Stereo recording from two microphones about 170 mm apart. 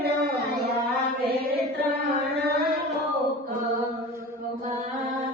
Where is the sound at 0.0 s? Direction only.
70° right (ahead or behind).